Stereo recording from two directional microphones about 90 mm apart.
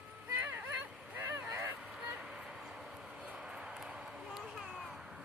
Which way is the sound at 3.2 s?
10° right (ahead or behind).